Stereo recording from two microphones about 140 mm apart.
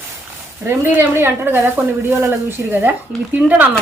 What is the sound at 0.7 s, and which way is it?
Speech, 15° right (ahead or behind).